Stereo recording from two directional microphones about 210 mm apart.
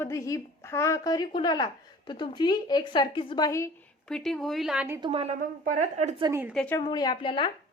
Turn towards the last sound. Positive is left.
turn(degrees=25)  # may be behind; listen again after turning